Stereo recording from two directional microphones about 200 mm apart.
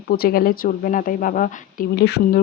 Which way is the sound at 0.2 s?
45° left (ahead or behind).